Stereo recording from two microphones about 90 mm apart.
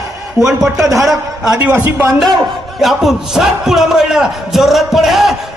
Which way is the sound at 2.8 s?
Centre (ahead or behind).